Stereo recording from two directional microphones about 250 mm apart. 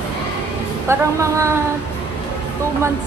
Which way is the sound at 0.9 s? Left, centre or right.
Centre.